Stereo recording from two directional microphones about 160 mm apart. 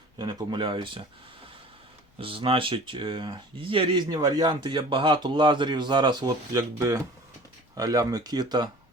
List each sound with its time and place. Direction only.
0.2 s speech: 25° right (ahead or behind)
2.1 s speech: 35° right (ahead or behind)